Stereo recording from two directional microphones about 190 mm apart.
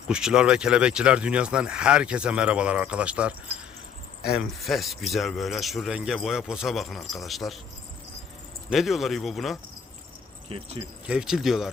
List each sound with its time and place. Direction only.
0.1 s speech: 5° right (ahead or behind)
4.4 s speech: centre (ahead or behind)
8.7 s speech: centre (ahead or behind)
10.5 s speech: 30° right (ahead or behind)
11.0 s speech: 5° right (ahead or behind)